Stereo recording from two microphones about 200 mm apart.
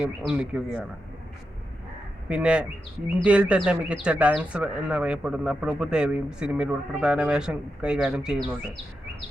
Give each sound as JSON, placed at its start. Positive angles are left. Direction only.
{"t": 0.0, "sound": "speech", "side_deg": -5}
{"t": 2.3, "sound": "speech", "side_deg": -5}